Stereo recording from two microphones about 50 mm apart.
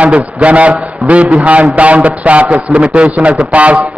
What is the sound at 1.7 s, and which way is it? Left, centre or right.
A man's voice, right.